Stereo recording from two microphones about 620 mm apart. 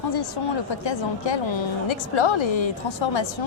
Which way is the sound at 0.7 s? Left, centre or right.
Left.